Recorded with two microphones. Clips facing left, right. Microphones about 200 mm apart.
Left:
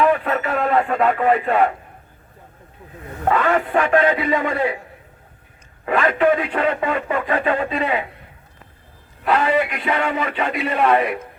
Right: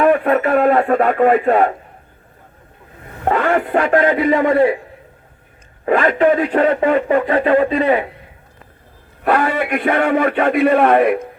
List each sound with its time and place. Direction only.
0.0 s speech: 50° right (ahead or behind)
3.2 s speech: 40° right (ahead or behind)
5.8 s speech: 40° right (ahead or behind)
9.2 s a man's voice: 55° right (ahead or behind)